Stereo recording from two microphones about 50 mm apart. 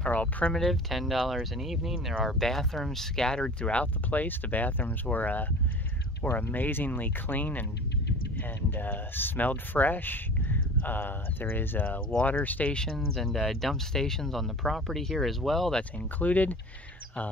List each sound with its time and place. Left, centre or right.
0.0 s a sound: left
0.5 s speech: centre
2.4 s speech: centre
3.8 s speech: left
6.5 s speech: left
8.7 s speech: left
12.7 s speech: centre
16.2 s speech: left